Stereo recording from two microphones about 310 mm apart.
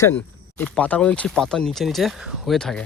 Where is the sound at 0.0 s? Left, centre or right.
Centre.